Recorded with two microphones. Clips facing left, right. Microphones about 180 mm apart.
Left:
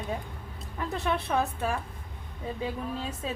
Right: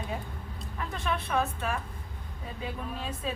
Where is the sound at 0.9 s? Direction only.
35° left (ahead or behind).